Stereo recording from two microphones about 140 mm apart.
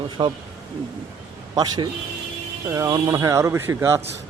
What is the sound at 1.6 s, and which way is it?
Speech, 30° right (ahead or behind).